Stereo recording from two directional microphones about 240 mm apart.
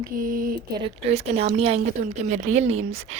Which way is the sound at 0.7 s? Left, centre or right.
Right.